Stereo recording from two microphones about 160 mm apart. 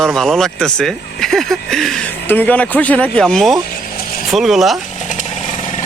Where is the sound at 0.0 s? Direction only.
Centre (ahead or behind).